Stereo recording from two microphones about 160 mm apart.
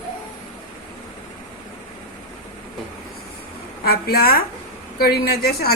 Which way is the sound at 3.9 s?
70° left (ahead or behind).